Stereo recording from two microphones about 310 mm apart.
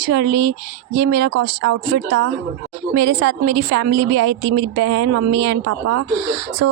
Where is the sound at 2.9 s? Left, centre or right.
Right.